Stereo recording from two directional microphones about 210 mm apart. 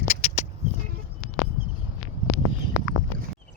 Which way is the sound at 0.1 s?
30° left (ahead or behind).